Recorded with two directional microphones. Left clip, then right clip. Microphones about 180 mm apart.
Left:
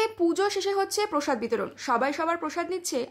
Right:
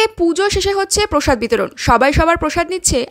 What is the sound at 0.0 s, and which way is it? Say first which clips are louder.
A woman's voice: right 10 dB; 30° right (ahead or behind).